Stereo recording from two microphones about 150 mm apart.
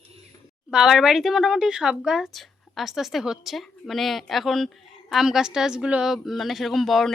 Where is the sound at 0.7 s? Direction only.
Centre (ahead or behind).